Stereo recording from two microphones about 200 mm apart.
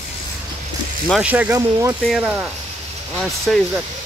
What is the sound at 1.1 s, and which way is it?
Speech, 5° right (ahead or behind).